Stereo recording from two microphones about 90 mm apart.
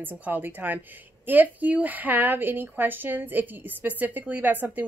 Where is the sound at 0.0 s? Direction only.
20° right (ahead or behind).